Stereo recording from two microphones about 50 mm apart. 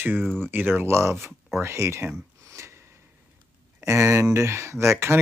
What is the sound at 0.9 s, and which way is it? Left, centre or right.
Speech, right.